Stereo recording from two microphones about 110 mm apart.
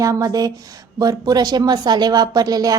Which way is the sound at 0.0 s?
30° right (ahead or behind).